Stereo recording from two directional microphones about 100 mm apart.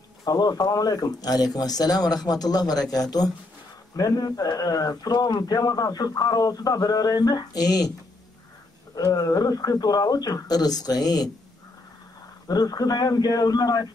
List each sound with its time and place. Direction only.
0.2 s speech: 40° left (ahead or behind)
8.9 s speech: 35° left (ahead or behind)
12.4 s speech: 40° left (ahead or behind)